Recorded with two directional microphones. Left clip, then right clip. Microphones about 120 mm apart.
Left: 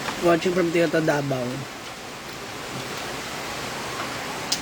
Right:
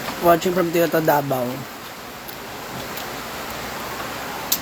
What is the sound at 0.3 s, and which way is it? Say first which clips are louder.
Speech: right 4 dB; 20° left (ahead or behind).